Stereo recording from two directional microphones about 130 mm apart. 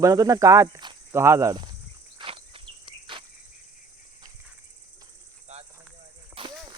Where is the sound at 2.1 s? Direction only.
45° right (ahead or behind).